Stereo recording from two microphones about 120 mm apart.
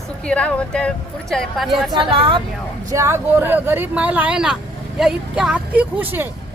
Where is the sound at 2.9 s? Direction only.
25° right (ahead or behind).